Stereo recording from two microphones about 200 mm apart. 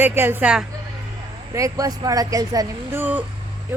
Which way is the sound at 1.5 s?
15° right (ahead or behind).